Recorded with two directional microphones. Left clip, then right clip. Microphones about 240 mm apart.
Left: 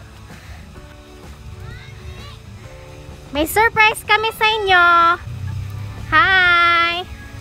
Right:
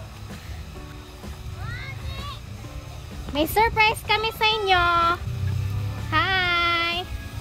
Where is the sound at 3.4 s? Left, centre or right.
Centre.